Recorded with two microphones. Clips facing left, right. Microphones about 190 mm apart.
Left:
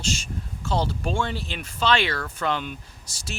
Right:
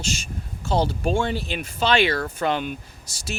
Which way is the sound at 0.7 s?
15° right (ahead or behind).